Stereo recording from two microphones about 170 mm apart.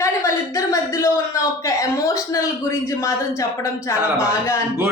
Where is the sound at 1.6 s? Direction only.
20° left (ahead or behind).